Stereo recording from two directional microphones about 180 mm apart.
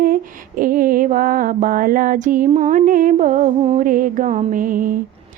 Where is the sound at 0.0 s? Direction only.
50° right (ahead or behind).